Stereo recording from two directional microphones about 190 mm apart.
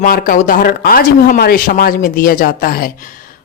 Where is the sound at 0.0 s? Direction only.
50° left (ahead or behind).